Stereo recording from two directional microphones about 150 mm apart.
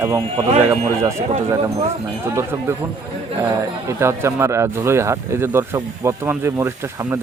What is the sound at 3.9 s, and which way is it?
Speech, 15° right (ahead or behind).